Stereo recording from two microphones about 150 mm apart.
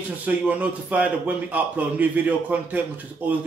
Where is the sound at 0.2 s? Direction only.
10° right (ahead or behind).